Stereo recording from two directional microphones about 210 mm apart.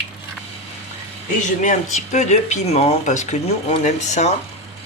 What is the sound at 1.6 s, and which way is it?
Speech, 35° left (ahead or behind).